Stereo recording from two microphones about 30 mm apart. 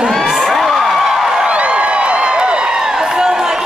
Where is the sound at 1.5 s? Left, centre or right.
Right.